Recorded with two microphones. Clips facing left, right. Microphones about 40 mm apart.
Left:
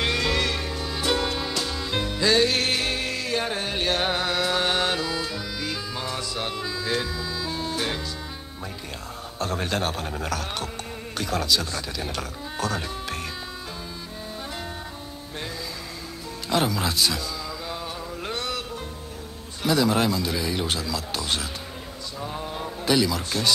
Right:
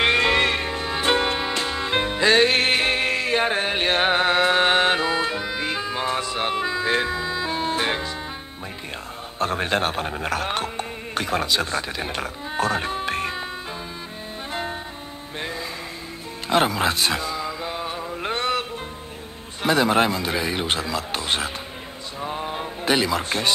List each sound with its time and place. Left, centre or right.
0.0 s music: right
9.4 s speech: right
16.4 s mantra: right
19.6 s speech: right
22.2 s a sound: right